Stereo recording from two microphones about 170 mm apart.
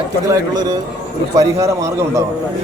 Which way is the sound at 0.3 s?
25° right (ahead or behind).